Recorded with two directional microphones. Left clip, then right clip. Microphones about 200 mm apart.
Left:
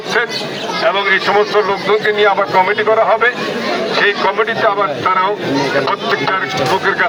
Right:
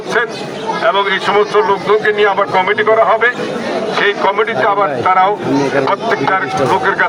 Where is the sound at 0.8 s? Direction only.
20° right (ahead or behind).